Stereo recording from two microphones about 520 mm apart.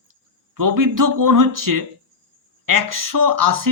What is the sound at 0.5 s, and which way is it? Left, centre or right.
Speech, right.